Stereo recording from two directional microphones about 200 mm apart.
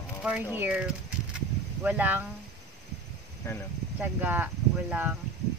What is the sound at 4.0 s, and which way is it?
Speech, 10° right (ahead or behind).